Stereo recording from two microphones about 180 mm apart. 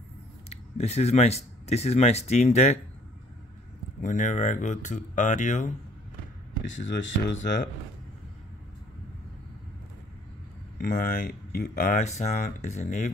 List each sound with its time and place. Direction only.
0.5 s speech: 35° left (ahead or behind)
4.0 s speech: 45° left (ahead or behind)
6.7 s speech: 90° left
10.8 s speech: 50° left (ahead or behind)